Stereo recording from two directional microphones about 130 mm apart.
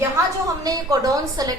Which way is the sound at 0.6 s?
25° right (ahead or behind).